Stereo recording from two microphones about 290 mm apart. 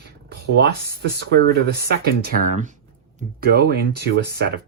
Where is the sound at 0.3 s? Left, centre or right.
Right.